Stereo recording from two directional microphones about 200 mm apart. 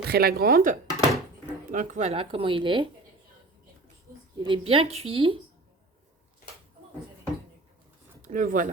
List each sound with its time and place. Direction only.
0.1 s speech: 50° right (ahead or behind); by 2.9 s 25° right (ahead or behind)
4.4 s speech: 25° right (ahead or behind)
8.2 s speech: 40° right (ahead or behind)